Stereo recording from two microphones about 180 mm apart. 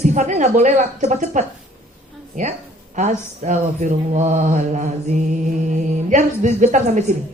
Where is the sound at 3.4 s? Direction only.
40° right (ahead or behind).